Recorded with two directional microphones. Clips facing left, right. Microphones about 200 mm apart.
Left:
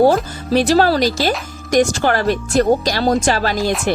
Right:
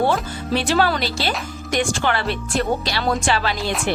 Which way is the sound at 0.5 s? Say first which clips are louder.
Left 6 dB; 40° left (ahead or behind).